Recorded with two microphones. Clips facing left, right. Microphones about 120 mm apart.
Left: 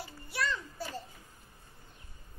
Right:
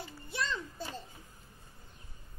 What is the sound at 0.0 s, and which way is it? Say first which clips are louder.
Children playing: left 2 dB; 25° right (ahead or behind).